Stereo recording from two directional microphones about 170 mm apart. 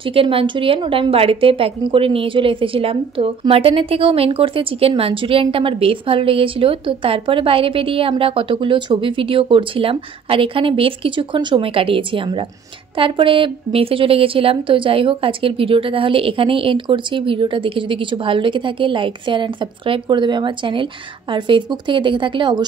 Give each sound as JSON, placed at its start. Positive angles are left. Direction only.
{"t": 0.0, "sound": "a woman's voice", "side_deg": -30}